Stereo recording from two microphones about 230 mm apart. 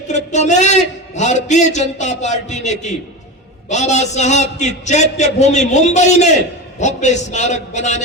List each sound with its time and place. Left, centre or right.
0.3 s a man's voice: left